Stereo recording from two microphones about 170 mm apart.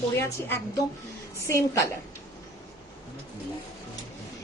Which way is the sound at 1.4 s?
15° left (ahead or behind).